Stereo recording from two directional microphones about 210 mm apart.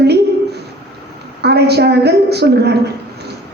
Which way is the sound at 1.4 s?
50° right (ahead or behind).